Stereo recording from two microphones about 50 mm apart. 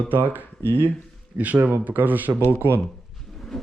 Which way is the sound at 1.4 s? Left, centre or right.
Right.